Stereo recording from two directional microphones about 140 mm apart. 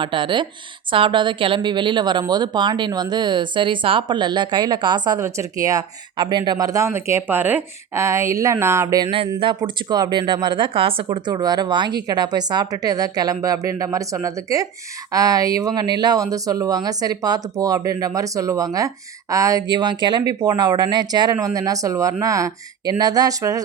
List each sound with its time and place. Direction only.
0.0 s speech: 35° right (ahead or behind)
9.4 s speech: 35° right (ahead or behind)